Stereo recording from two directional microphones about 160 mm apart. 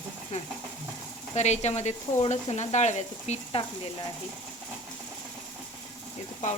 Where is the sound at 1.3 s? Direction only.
45° left (ahead or behind).